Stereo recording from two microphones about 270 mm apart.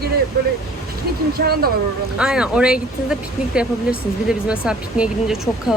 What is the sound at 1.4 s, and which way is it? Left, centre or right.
Speech, right.